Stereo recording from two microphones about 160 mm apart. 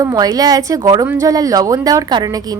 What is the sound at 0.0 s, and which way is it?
A woman's voice, 20° right (ahead or behind).